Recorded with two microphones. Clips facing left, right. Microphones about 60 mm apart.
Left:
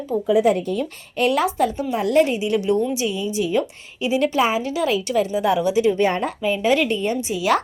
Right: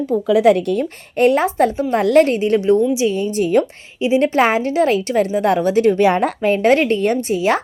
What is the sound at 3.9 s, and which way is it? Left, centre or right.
Speech, right.